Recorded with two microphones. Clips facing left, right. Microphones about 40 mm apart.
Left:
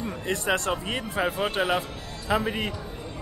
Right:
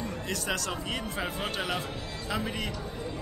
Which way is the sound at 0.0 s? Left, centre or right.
Left.